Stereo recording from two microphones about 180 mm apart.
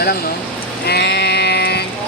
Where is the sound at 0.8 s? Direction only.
65° left (ahead or behind).